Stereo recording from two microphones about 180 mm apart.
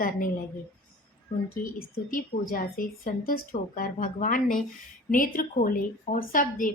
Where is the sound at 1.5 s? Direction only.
50° left (ahead or behind).